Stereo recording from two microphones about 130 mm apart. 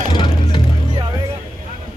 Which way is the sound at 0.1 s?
35° left (ahead or behind).